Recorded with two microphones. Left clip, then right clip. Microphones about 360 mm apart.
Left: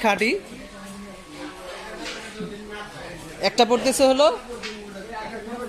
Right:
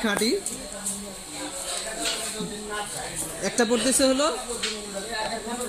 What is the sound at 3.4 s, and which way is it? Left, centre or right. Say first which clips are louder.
Speech: left 5 dB; centre.